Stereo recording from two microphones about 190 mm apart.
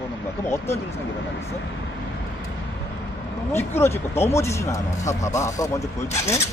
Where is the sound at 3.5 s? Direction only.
10° left (ahead or behind).